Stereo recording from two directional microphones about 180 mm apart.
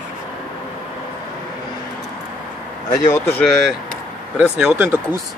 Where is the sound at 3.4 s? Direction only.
Centre (ahead or behind).